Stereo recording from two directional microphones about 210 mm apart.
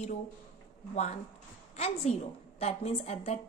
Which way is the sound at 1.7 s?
30° left (ahead or behind).